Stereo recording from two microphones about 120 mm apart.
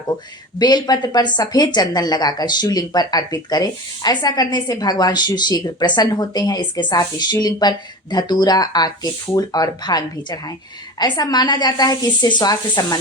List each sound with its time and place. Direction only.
0.6 s speech: 35° left (ahead or behind)